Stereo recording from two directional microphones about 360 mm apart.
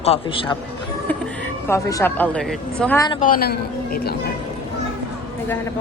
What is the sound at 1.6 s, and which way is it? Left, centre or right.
Speech, centre.